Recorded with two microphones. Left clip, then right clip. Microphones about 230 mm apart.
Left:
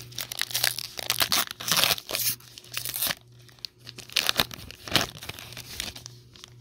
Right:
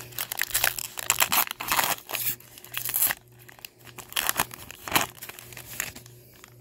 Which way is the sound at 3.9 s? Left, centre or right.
Centre.